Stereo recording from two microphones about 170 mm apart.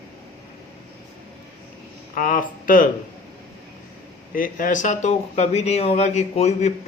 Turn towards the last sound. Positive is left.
turn(degrees=40)  # may be behind; listen again after turning